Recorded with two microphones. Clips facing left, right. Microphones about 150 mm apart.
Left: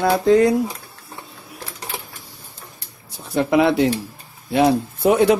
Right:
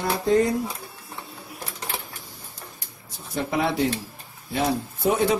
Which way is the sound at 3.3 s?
80° left.